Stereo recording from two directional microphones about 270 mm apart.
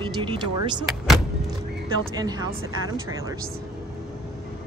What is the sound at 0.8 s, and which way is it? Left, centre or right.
Vehicle, centre.